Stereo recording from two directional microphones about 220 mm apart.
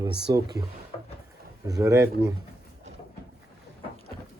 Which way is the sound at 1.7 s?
15° right (ahead or behind).